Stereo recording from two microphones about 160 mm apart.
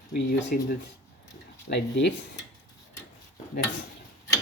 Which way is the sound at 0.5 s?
65° left (ahead or behind).